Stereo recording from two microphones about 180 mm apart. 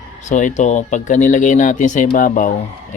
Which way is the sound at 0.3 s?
40° left (ahead or behind).